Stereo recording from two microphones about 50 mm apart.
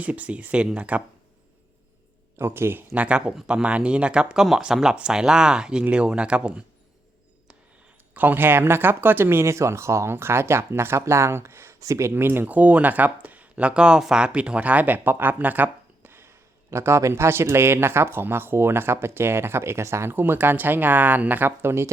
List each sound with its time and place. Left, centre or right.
0.0 s speech: right
2.4 s speech: right
2.9 s speech: right
8.1 s speech: right
12.1 s speech: right
12.5 s speech: right
16.6 s speech: right
20.1 s speech: right
21.6 s speech: right